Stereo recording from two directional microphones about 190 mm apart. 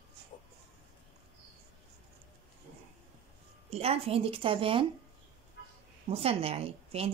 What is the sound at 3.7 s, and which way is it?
A woman's voice, 30° right (ahead or behind).